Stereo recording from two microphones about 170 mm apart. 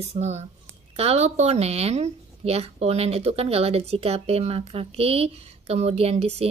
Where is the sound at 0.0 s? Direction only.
40° right (ahead or behind).